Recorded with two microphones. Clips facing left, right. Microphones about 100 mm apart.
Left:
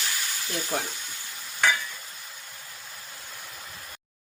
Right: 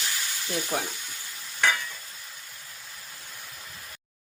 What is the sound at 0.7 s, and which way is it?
Stir, 10° right (ahead or behind).